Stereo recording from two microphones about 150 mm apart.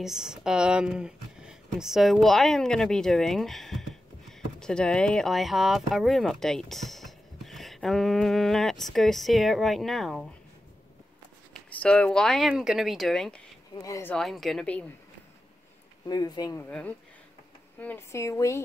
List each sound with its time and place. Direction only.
0.0 s speech: 5° right (ahead or behind)
11.5 s speech: 5° left (ahead or behind)
13.8 s speech: 20° left (ahead or behind)
14.1 s speech: centre (ahead or behind)
16.1 s speech: 25° left (ahead or behind)
16.5 s speech: 15° left (ahead or behind)